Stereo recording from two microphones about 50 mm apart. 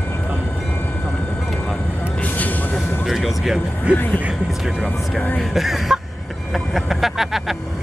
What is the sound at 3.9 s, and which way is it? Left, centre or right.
Speech, right.